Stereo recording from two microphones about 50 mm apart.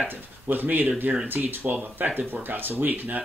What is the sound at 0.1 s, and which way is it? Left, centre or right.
Speech, right.